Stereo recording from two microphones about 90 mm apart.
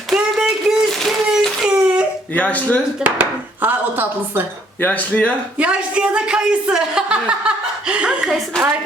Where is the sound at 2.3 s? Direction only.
20° left (ahead or behind).